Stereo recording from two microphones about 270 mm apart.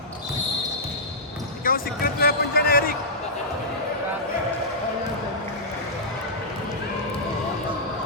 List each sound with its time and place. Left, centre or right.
1.7 s basketball bounce: left